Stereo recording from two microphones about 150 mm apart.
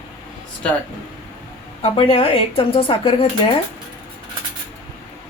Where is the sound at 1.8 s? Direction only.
35° left (ahead or behind).